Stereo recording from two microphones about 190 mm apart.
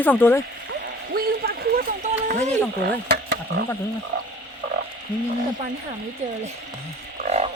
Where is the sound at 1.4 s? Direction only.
50° right (ahead or behind).